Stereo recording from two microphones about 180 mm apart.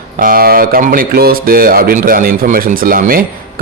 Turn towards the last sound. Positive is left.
turn(degrees=-50)  # may be behind; listen again after turning